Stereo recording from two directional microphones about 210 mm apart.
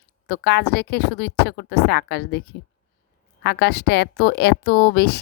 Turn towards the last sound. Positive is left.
turn(degrees=50)  # may be behind; listen again after turning